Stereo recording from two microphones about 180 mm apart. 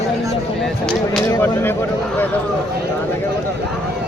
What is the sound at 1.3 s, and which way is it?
Speech, 10° left (ahead or behind).